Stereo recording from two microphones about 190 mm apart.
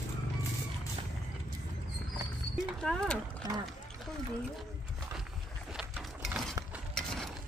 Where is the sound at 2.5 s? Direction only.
5° left (ahead or behind).